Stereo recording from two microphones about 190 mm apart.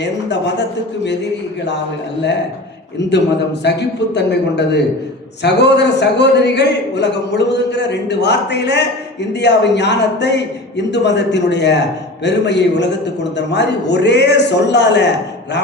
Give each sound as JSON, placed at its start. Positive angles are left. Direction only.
{"t": 0.0, "sound": "a man's voice", "side_deg": 65}
{"t": 3.0, "sound": "a man's voice", "side_deg": 65}